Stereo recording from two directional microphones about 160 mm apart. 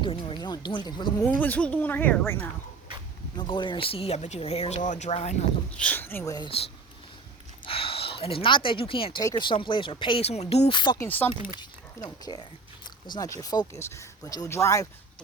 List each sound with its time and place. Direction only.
0.0 s speech: 30° left (ahead or behind)
1.2 s speech: 10° left (ahead or behind)
3.3 s speech: 30° left (ahead or behind)
5.7 s speech: 10° left (ahead or behind)
7.6 s speech: 35° left (ahead or behind)
11.0 s speech: 10° left (ahead or behind)
11.6 s speech: 25° left (ahead or behind)